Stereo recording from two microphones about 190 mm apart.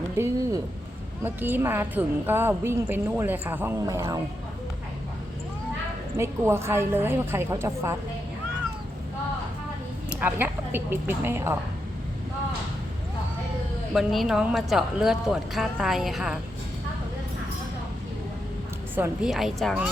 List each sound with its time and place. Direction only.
0.2 s a woman's voice: 20° right (ahead or behind)
6.1 s a woman's voice: 15° right (ahead or behind)
10.2 s a woman's voice: 10° right (ahead or behind)
13.9 s speech: centre (ahead or behind)
18.9 s speech: 5° right (ahead or behind)